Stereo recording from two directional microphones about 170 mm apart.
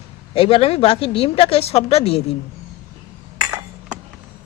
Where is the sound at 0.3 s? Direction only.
35° left (ahead or behind).